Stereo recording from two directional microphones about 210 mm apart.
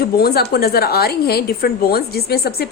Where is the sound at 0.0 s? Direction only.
45° left (ahead or behind).